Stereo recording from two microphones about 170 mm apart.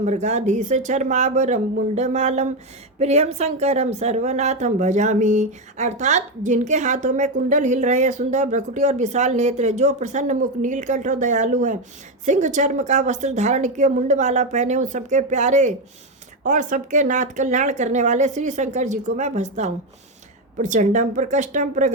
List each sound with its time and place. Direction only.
0.0 s a woman's voice: 45° right (ahead or behind)